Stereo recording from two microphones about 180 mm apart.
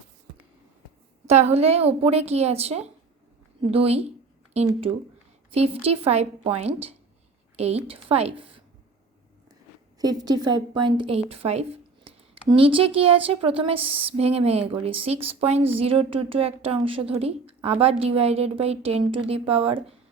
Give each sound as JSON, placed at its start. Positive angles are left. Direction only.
{"t": 1.3, "sound": "a woman's voice", "side_deg": -35}
{"t": 5.5, "sound": "a woman's voice", "side_deg": -35}
{"t": 10.0, "sound": "a woman's voice", "side_deg": -20}